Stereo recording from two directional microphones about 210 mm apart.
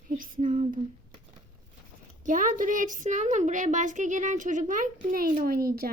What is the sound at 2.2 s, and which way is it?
A woman's voice, 40° right (ahead or behind).